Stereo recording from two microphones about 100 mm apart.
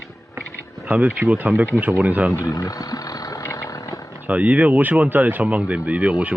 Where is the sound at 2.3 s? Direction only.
30° left (ahead or behind).